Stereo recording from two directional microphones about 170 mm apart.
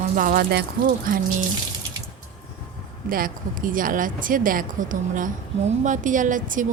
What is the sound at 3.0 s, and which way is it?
Speech, 55° right (ahead or behind).